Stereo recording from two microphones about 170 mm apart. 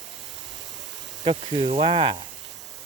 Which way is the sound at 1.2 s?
30° right (ahead or behind).